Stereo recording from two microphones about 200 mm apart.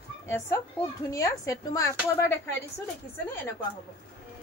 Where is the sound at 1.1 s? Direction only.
15° left (ahead or behind).